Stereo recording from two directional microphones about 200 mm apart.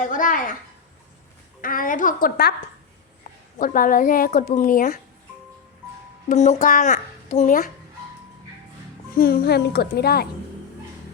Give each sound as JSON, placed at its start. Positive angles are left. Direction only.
{"t": 0.0, "sound": "speech", "side_deg": 40}
{"t": 1.6, "sound": "a woman's voice", "side_deg": 45}
{"t": 3.6, "sound": "a woman's voice", "side_deg": 45}
{"t": 6.2, "sound": "a child's voice", "side_deg": 35}
{"t": 9.1, "sound": "a woman's voice", "side_deg": 50}